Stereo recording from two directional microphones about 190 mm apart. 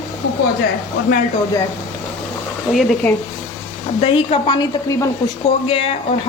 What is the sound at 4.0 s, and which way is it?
A woman's voice, 30° left (ahead or behind).